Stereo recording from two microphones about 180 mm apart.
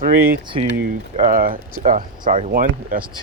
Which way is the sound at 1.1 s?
50° right (ahead or behind).